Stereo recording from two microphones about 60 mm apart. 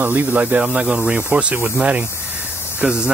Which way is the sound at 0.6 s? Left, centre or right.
Centre.